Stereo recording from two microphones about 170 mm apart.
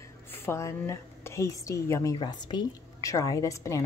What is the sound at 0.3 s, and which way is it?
A woman's voice, 15° left (ahead or behind).